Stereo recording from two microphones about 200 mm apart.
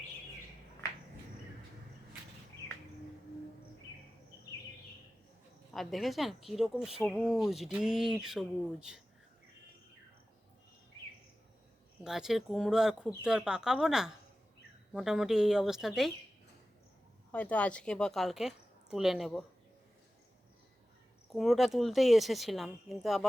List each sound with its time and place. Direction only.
5.7 s a woman's voice: centre (ahead or behind)
12.0 s a woman's voice: centre (ahead or behind)
17.3 s a woman's voice: 5° left (ahead or behind)
21.3 s a woman's voice: centre (ahead or behind)